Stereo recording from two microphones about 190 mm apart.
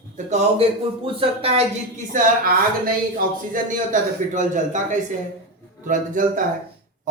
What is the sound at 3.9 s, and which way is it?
A man's voice, 40° right (ahead or behind).